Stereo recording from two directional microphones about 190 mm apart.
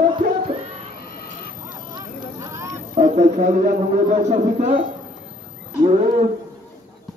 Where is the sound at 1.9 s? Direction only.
15° right (ahead or behind).